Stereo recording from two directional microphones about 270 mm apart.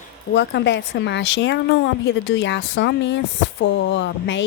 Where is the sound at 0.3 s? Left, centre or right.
Left.